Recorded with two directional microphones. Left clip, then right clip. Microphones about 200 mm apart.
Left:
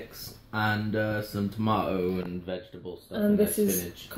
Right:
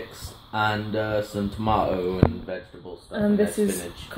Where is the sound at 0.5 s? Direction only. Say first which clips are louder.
Right 4 dB; 45° left (ahead or behind).